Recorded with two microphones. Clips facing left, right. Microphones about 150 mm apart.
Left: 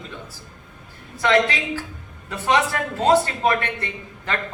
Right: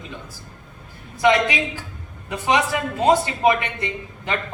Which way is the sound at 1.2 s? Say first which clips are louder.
Right 1 dB; 15° right (ahead or behind).